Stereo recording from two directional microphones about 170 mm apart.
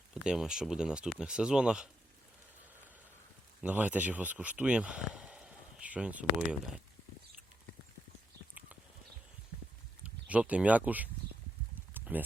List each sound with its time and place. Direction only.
0.1 s speech: 5° right (ahead or behind)
3.6 s speech: 10° right (ahead or behind)
10.0 s speech: 10° right (ahead or behind)
11.7 s a sound: 10° right (ahead or behind)